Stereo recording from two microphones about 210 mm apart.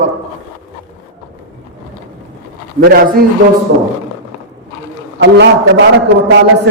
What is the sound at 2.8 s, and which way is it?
Speech, 45° right (ahead or behind).